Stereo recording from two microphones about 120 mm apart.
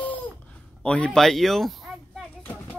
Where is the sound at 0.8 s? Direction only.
10° left (ahead or behind).